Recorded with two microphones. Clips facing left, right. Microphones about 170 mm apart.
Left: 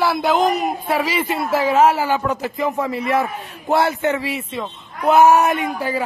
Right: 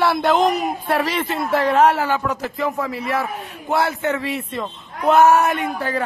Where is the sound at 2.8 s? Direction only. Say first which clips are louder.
Left 3 dB; centre (ahead or behind).